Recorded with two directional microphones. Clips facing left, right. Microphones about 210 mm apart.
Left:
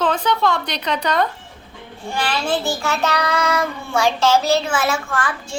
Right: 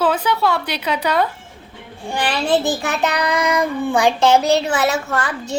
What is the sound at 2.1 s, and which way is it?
A child's voice, 20° right (ahead or behind).